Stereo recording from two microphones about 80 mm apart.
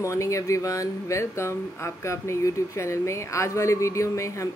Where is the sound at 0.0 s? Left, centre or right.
Left.